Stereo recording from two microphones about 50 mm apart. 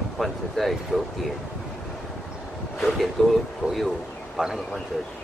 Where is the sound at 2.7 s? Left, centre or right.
Centre.